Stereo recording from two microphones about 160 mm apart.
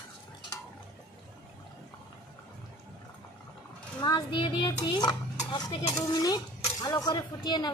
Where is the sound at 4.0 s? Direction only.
30° left (ahead or behind).